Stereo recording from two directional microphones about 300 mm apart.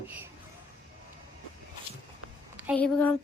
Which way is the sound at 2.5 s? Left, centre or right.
Centre.